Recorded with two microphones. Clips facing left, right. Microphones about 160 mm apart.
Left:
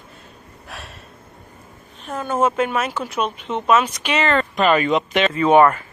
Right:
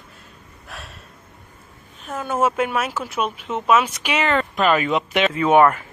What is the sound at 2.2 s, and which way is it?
Speech, 10° right (ahead or behind).